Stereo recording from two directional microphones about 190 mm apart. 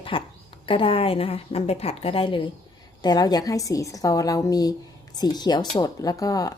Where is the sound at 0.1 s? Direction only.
25° left (ahead or behind).